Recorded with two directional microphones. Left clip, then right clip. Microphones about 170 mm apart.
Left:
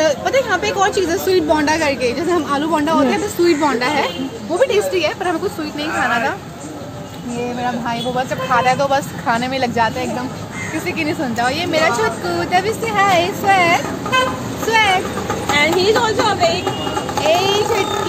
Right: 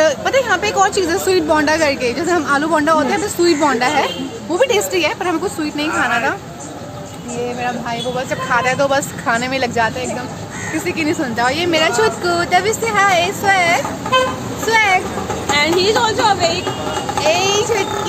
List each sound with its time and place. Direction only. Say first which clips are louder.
0.0 s a woman's voice: right 1 dB; 15° right (ahead or behind)
8.3 s a woman's voice: left 1 dB; 20° right (ahead or behind); by 15.0 s 40° right (ahead or behind)
15.5 s a woman's voice: even; 10° right (ahead or behind)
17.2 s a sound: even; 30° right (ahead or behind)